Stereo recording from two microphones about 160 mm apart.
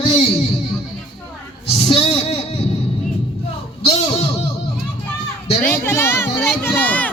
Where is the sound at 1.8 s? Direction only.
40° left (ahead or behind).